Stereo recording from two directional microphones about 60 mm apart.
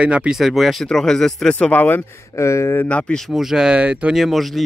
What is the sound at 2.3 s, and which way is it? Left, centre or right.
Speech, left.